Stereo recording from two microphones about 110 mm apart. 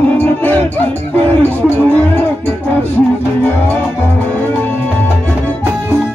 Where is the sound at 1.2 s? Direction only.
20° left (ahead or behind).